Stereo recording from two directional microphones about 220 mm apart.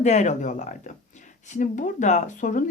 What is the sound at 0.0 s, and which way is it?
A woman's voice, 30° left (ahead or behind).